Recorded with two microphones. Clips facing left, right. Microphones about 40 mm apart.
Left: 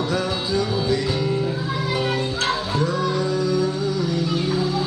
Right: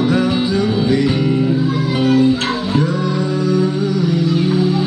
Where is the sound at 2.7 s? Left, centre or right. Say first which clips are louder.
Right 4 dB; right.